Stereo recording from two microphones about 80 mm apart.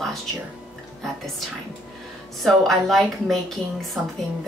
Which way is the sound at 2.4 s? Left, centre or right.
Centre.